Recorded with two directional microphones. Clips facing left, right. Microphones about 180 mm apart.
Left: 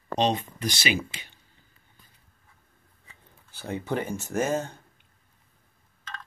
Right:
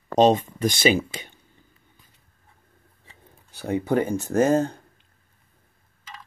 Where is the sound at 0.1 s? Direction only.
45° right (ahead or behind).